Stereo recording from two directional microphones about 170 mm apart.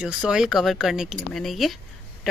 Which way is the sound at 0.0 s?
5° right (ahead or behind).